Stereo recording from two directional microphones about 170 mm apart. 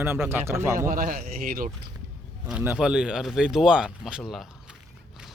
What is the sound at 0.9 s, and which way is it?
Speech, 50° right (ahead or behind).